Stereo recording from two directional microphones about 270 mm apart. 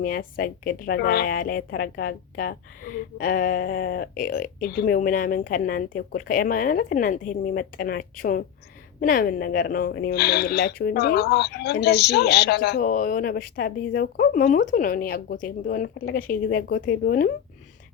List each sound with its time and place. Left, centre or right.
0.0 s a woman's voice: left